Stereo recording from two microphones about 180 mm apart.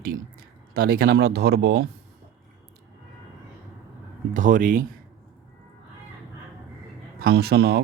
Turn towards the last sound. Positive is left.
turn(degrees=-65)  # may be behind; listen again after turning